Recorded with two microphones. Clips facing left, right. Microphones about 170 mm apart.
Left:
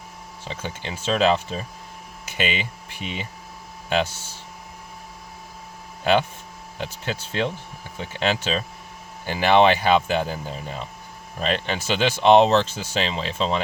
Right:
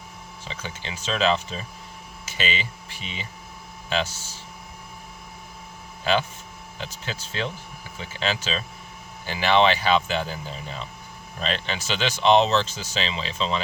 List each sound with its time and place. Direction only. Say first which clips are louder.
0.4 s speech: left 4 dB; 50° left (ahead or behind)
6.7 s speech: left 5 dB; 55° left (ahead or behind)